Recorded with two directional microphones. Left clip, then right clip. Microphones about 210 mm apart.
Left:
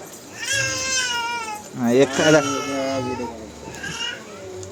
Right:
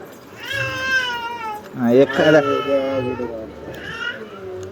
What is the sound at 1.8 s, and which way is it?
Speech, centre (ahead or behind).